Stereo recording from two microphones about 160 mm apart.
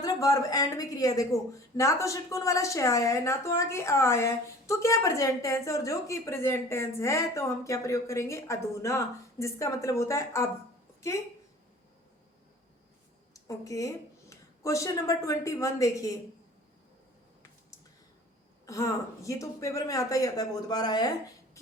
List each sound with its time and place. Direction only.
0.0 s speech: 20° left (ahead or behind)
13.3 s a woman's voice: 20° left (ahead or behind)
18.6 s speech: 20° left (ahead or behind)